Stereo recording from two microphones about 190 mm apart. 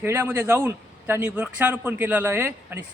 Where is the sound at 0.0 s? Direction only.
10° right (ahead or behind).